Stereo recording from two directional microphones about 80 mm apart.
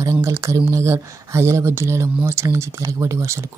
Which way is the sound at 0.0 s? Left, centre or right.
Right.